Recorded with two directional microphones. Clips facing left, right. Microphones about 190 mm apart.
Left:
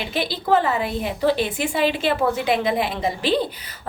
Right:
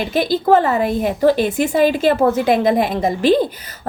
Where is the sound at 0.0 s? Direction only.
45° right (ahead or behind).